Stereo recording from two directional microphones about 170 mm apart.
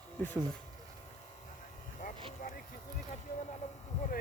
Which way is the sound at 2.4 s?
50° left (ahead or behind).